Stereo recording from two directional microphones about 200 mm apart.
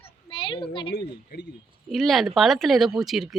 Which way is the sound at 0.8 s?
55° left (ahead or behind).